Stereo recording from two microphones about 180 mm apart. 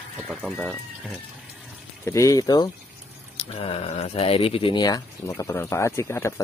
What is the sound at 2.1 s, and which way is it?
Speech, 15° left (ahead or behind).